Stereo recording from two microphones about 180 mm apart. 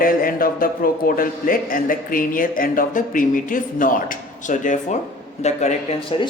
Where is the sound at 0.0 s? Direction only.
50° left (ahead or behind).